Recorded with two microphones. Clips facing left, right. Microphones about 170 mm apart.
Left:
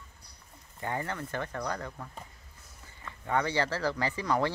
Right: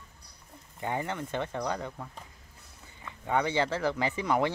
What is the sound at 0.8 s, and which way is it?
Speech, 15° right (ahead or behind).